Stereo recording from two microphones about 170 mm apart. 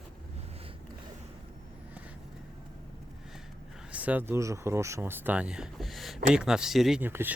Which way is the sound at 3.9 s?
10° right (ahead or behind).